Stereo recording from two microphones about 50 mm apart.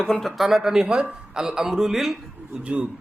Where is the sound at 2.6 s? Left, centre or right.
Right.